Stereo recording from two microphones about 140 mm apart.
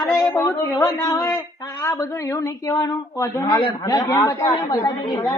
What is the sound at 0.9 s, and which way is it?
A woman's voice, 20° left (ahead or behind).